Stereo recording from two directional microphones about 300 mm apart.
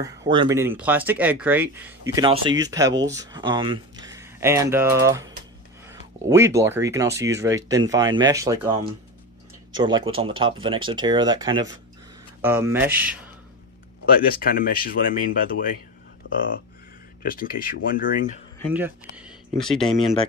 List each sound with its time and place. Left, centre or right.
0.0 s speech: centre
14.0 s speech: left
16.2 s a sound: left
17.2 s speech: left
18.7 s speech: centre